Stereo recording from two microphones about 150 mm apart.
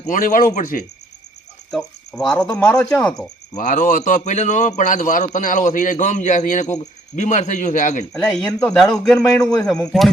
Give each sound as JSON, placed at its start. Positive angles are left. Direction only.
{"t": 0.0, "sound": "a man's voice", "side_deg": 60}
{"t": 1.7, "sound": "speech", "side_deg": 5}
{"t": 3.5, "sound": "a man's voice", "side_deg": 60}
{"t": 8.1, "sound": "a man's voice", "side_deg": 5}